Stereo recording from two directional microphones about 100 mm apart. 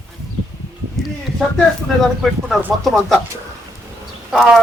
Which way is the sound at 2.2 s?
Centre (ahead or behind).